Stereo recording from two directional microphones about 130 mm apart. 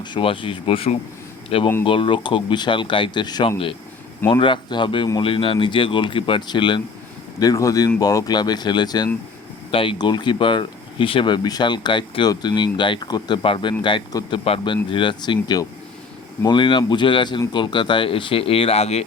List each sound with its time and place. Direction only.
0.0 s speech: 40° left (ahead or behind)
7.3 s speech: 25° left (ahead or behind); by 19.0 s 55° left (ahead or behind)